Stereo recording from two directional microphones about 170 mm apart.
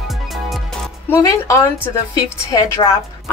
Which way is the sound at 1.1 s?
15° left (ahead or behind).